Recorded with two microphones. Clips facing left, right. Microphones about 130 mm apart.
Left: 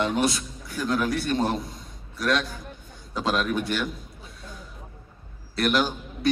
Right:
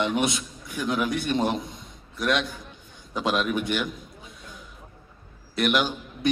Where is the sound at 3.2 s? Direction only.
20° right (ahead or behind).